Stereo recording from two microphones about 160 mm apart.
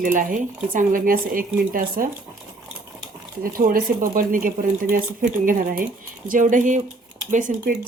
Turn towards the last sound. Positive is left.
turn(degrees=-50)  # may be behind; listen again after turning